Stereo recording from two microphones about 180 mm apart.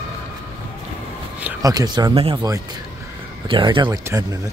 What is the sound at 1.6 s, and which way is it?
Speech, 20° right (ahead or behind).